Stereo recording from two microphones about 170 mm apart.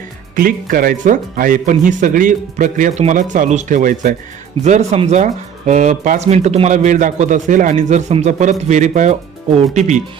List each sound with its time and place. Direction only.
0.3 s speech: 55° right (ahead or behind)